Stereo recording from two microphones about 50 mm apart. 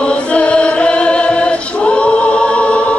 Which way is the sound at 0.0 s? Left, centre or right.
Left.